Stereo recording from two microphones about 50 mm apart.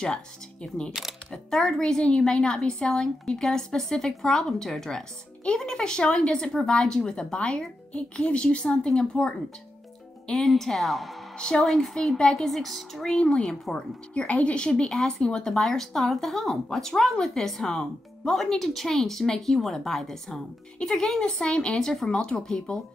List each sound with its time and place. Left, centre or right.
0.0 s a woman's voice: centre
10.3 s speech: centre
11.3 s a woman's voice: centre
13.0 s speech: centre